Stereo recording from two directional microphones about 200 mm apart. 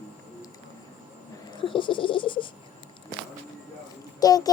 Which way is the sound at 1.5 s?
25° left (ahead or behind).